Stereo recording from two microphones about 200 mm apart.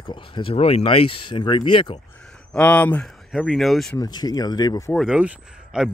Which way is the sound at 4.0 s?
20° left (ahead or behind).